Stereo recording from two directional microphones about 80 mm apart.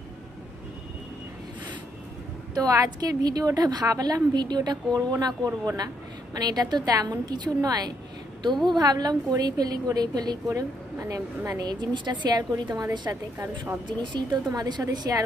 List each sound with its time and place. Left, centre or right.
2.5 s a woman's voice: right
11.0 s a woman's voice: right
11.6 s a woman's voice: right
13.1 s a woman's voice: right
13.8 s a woman's voice: right
14.5 s a woman's voice: right